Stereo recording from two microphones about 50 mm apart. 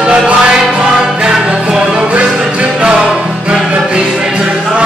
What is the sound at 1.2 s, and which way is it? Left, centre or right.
Music, centre.